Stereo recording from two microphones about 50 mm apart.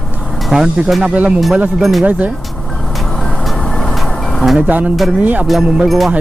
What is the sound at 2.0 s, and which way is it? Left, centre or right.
Speech, right.